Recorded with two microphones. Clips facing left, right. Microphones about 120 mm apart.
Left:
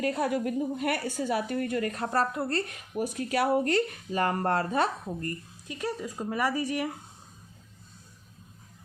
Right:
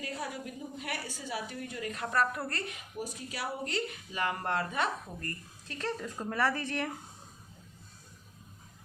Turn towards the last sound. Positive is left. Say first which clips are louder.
# left 3 dB
turn(degrees=10)  # may be behind; listen again after turning